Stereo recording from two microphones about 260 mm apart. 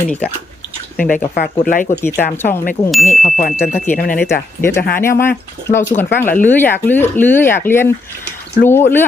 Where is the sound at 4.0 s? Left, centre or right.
Left.